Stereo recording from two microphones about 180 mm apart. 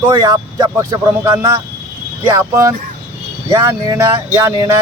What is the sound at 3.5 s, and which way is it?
Speech, 15° right (ahead or behind).